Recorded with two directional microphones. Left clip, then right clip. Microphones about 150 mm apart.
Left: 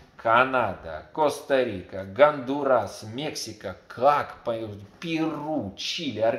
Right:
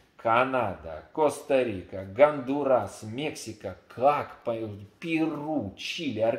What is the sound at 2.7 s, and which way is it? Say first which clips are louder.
Speech: left 3 dB; 5° right (ahead or behind).